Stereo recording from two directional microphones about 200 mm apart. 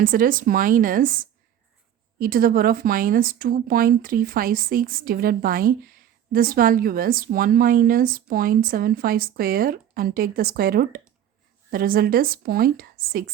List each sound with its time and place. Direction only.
0.0 s speech: 45° right (ahead or behind)